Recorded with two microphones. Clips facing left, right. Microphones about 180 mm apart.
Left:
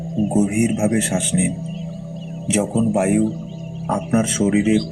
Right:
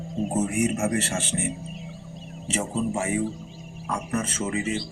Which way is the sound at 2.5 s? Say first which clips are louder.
Left 9 dB; 70° left (ahead or behind).